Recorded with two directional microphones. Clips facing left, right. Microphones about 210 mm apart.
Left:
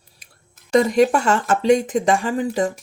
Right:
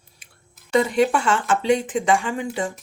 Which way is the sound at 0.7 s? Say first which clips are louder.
Left 3 dB; 40° left (ahead or behind).